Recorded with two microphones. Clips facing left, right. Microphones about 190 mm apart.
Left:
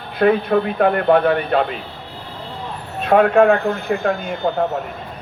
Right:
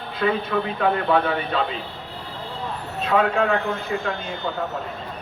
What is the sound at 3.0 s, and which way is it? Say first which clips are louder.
A man's voice: left 8 dB; 55° left (ahead or behind).